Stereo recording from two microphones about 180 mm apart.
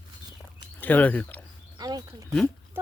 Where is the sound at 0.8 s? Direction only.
10° left (ahead or behind).